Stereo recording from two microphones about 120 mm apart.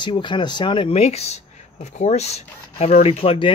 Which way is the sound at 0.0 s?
40° left (ahead or behind).